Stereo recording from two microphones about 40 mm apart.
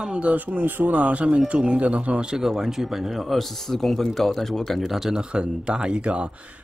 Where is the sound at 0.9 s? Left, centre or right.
Right.